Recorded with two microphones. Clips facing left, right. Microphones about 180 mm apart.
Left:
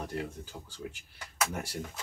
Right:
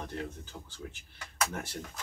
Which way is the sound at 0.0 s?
10° left (ahead or behind).